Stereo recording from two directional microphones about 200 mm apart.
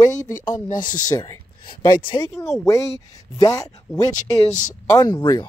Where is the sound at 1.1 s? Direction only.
20° left (ahead or behind).